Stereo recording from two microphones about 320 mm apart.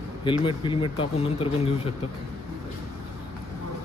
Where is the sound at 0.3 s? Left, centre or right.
Centre.